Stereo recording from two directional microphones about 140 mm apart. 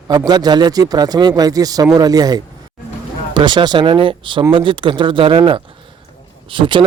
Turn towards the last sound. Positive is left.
turn(degrees=-35)  # may be behind; listen again after turning